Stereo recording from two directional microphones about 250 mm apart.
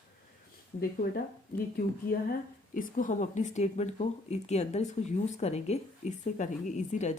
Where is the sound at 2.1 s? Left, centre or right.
Left.